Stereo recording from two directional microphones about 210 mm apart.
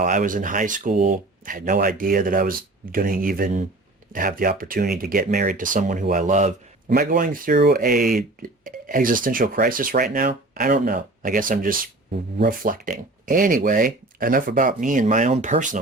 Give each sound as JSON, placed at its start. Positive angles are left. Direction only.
{"t": 0.0, "sound": "speech", "side_deg": -40}